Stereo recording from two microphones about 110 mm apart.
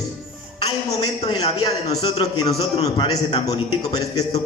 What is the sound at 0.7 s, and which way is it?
A man's voice, 40° left (ahead or behind).